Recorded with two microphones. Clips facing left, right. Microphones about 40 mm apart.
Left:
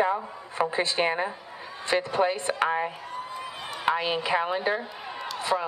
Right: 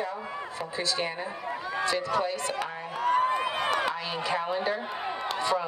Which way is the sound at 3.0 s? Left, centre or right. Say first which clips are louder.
Right 12 dB; right.